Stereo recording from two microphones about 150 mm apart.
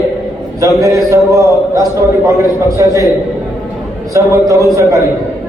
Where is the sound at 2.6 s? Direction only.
20° right (ahead or behind).